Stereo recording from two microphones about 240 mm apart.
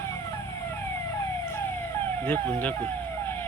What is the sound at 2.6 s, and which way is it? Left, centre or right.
Vehicle, centre.